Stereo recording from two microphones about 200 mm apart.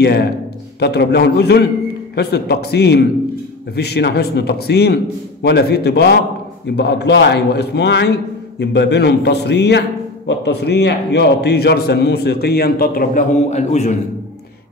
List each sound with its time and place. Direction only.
0.0 s a man's voice: 55° left (ahead or behind); by 13.9 s 35° left (ahead or behind)